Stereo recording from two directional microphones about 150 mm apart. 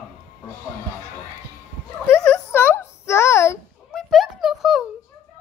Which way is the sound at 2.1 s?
15° left (ahead or behind).